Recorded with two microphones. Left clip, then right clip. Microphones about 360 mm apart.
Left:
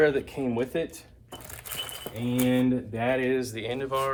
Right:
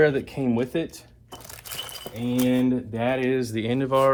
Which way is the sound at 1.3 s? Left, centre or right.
Centre.